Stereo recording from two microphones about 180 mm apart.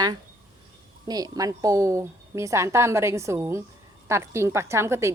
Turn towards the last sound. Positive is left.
turn(degrees=-15)  # may be behind; listen again after turning